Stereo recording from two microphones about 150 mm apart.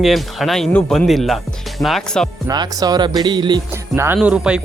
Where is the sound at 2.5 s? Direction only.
25° right (ahead or behind).